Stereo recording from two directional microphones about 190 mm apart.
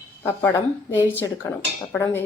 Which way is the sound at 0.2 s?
15° left (ahead or behind).